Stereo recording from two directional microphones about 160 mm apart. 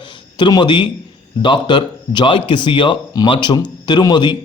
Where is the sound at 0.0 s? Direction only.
30° left (ahead or behind).